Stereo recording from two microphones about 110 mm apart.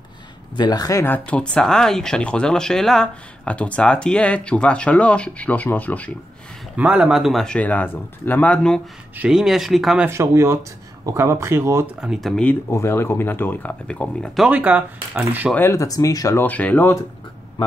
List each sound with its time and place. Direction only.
0.6 s speech: 40° left (ahead or behind)
1.0 s speech: 15° left (ahead or behind)
6.8 s speech: 10° right (ahead or behind)
7.4 s speech: 15° left (ahead or behind)
9.3 s speech: 5° right (ahead or behind)
10.0 s speech: 25° right (ahead or behind)
12.0 s speech: centre (ahead or behind)
12.6 s speech: 25° left (ahead or behind); by 14.4 s 10° left (ahead or behind)
14.4 s speech: 10° right (ahead or behind)
15.5 s speech: 25° left (ahead or behind)
16.3 s speech: 15° left (ahead or behind)